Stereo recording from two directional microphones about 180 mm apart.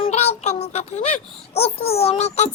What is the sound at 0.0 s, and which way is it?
A child's voice, 35° left (ahead or behind).